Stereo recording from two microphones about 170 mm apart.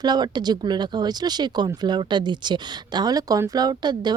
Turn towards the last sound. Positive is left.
turn(degrees=-25)  # may be behind; listen again after turning